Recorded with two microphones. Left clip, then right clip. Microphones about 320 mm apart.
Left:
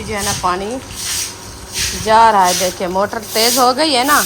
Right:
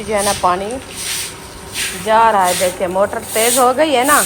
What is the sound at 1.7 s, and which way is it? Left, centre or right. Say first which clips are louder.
Speech: left 2 dB; centre.